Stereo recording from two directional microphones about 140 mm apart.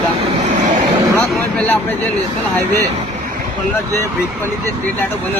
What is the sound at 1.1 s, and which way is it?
Speech, 10° left (ahead or behind).